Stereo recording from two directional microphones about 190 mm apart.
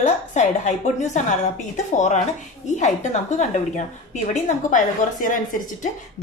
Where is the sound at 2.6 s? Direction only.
40° left (ahead or behind).